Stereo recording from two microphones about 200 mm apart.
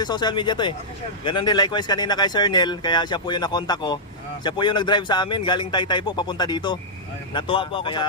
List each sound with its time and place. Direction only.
0.0 s speech: 20° left (ahead or behind)